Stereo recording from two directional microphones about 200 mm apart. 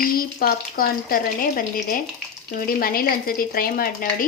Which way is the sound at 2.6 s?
45° left (ahead or behind).